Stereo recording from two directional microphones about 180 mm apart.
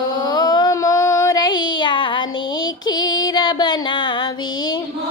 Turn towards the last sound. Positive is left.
turn(degrees=25)  # may be behind; listen again after turning